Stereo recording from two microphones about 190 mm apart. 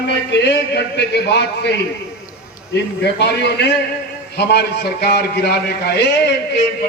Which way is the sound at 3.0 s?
60° left (ahead or behind).